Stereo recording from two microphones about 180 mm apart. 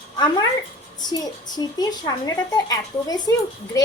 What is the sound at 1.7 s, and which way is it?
A woman's voice, 20° left (ahead or behind).